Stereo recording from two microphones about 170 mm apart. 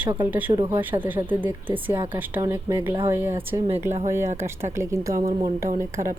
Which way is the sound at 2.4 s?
15° right (ahead or behind).